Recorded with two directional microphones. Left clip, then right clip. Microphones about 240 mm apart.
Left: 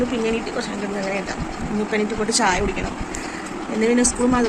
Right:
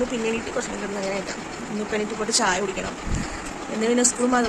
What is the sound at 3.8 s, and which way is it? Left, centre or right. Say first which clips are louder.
Speech: left 2 dB; centre.